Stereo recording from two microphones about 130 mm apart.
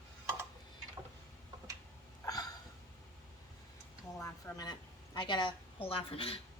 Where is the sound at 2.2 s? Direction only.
30° left (ahead or behind).